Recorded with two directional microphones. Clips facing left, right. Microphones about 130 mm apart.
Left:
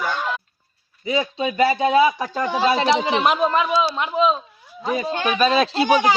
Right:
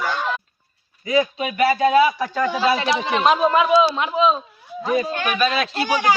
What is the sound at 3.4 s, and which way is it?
Speech, centre (ahead or behind).